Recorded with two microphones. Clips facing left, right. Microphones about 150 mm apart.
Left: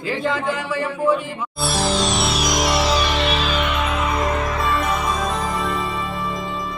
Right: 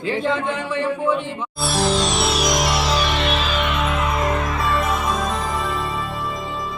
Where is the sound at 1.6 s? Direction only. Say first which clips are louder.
Right 1 dB; centre (ahead or behind).